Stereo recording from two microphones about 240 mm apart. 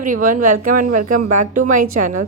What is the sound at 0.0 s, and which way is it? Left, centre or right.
A woman's voice, right.